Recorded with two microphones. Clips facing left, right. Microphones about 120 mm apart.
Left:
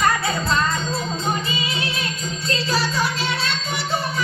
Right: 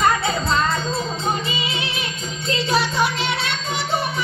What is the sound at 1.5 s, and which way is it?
Music, 20° right (ahead or behind).